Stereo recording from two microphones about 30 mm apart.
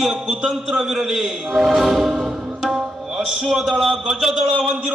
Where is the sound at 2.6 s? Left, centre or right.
Centre.